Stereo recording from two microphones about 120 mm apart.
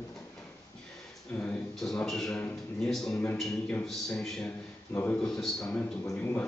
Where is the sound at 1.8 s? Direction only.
Centre (ahead or behind).